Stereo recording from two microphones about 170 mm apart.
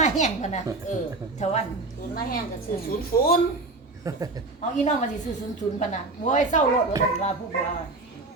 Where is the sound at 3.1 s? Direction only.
60° left (ahead or behind).